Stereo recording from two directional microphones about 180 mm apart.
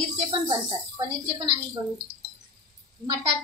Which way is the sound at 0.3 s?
25° right (ahead or behind).